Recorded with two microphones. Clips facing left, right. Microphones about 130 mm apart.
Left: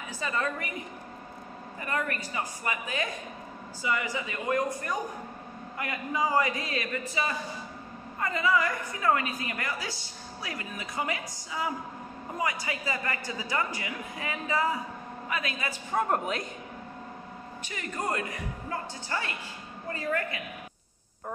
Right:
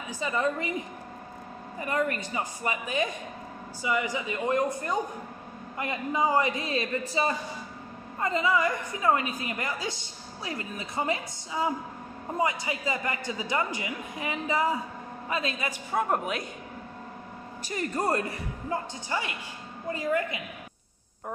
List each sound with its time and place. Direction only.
0.2 s a woman's voice: 15° right (ahead or behind)
1.9 s a woman's voice: 20° right (ahead or behind)
15.9 s a woman's voice: 5° right (ahead or behind)
17.6 s speech: 35° right (ahead or behind)
18.7 s a woman's voice: 15° right (ahead or behind)